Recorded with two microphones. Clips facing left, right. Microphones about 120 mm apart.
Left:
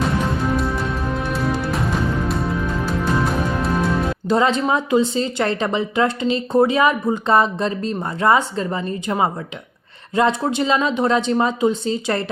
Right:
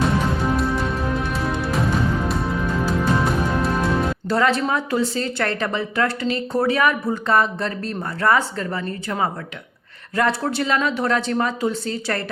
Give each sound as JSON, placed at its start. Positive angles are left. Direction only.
{"t": 0.4, "sound": "music", "side_deg": 0}
{"t": 4.3, "sound": "a woman's voice", "side_deg": 20}